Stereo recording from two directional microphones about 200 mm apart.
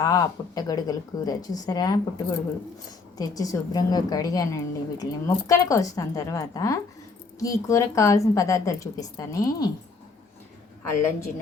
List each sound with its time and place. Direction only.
0.0 s a woman's voice: 20° left (ahead or behind)